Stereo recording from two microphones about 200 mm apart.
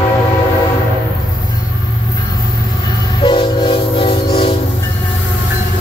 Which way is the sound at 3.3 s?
25° left (ahead or behind).